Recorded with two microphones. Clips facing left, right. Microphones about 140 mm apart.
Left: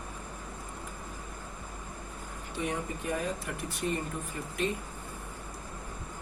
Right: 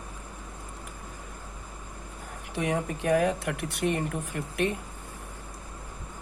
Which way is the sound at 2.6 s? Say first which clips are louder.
Right 5 dB; 85° right.